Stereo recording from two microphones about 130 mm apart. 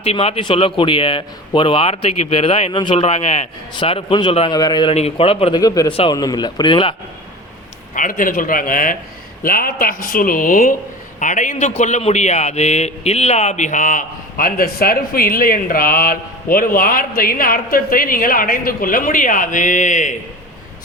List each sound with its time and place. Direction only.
0.0 s speech: 50° left (ahead or behind); by 4.9 s 35° left (ahead or behind)
4.9 s speech: 50° left (ahead or behind)
5.5 s a man's voice: 30° left (ahead or behind)
5.9 s speech: 45° left (ahead or behind)
6.1 s speech: 30° left (ahead or behind)
7.9 s a man's voice: 90° left
11.2 s a man's voice: 75° left (ahead or behind)